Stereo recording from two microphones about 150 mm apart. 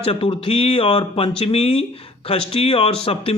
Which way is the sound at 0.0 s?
40° left (ahead or behind).